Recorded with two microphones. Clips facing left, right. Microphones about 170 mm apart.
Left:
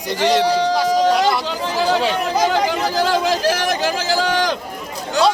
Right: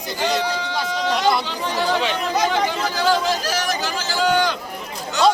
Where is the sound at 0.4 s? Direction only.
35° left (ahead or behind).